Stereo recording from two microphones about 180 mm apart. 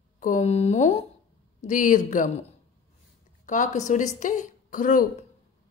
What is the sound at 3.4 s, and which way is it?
A woman's voice, 45° left (ahead or behind).